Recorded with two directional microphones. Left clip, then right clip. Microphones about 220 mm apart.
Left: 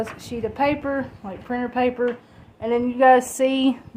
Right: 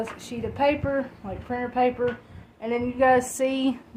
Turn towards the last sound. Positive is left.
turn(degrees=25)  # may be behind; listen again after turning